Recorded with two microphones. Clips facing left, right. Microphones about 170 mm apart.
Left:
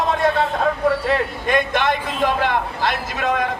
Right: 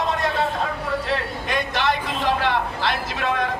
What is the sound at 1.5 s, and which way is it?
A man's voice, 50° left (ahead or behind).